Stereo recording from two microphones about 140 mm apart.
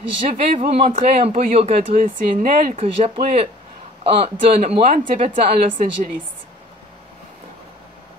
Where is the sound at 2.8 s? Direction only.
45° right (ahead or behind).